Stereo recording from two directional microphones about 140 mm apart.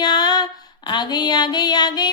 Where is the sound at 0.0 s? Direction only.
30° left (ahead or behind).